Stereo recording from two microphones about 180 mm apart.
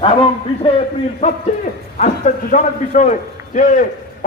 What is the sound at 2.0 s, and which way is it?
A man's voice, 40° left (ahead or behind).